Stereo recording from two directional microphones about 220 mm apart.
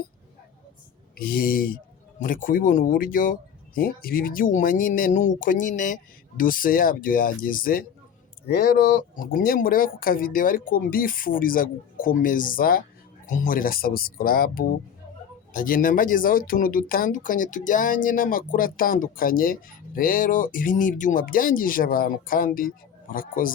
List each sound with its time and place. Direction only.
1.1 s speech: 40° left (ahead or behind)